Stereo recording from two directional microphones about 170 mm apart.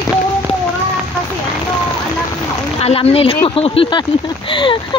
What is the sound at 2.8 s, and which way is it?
Speech, 35° left (ahead or behind).